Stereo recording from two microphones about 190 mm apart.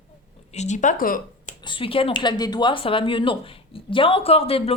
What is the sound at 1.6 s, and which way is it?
Speech, 25° left (ahead or behind).